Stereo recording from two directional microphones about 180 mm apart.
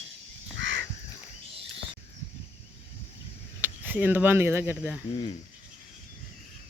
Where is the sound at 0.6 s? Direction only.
90° right.